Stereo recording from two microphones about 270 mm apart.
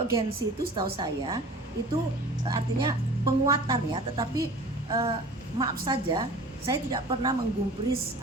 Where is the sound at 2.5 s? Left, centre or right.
Centre.